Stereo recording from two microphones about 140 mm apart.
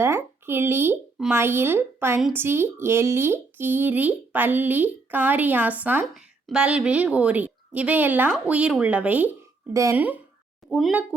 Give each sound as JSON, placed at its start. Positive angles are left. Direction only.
{"t": 0.0, "sound": "speech", "side_deg": -15}
{"t": 9.7, "sound": "speech", "side_deg": -25}
{"t": 10.7, "sound": "speech", "side_deg": 0}